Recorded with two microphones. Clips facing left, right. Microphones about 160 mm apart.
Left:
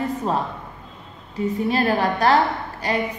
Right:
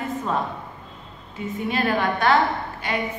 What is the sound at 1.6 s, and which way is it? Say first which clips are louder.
A woman's voice: left 1 dB; 35° left (ahead or behind).